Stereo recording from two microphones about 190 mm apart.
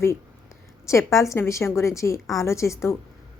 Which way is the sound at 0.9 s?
15° left (ahead or behind).